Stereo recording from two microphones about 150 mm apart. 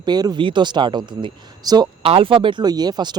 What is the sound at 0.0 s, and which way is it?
Speech, 30° right (ahead or behind).